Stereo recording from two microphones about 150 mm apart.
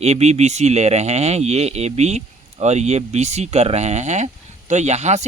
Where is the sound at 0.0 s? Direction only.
45° right (ahead or behind).